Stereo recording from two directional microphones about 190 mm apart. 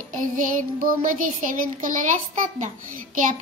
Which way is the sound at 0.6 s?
45° right (ahead or behind).